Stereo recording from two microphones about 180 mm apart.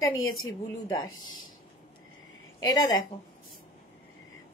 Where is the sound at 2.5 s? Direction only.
20° left (ahead or behind).